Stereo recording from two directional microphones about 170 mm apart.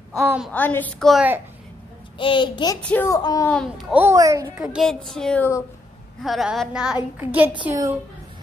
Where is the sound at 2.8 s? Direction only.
15° left (ahead or behind).